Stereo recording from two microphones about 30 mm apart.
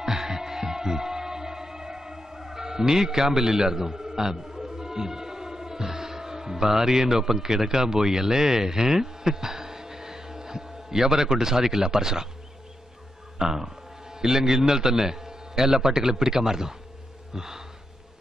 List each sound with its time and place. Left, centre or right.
0.0 s music: centre
13.4 s a man's voice: centre
17.3 s gasp: centre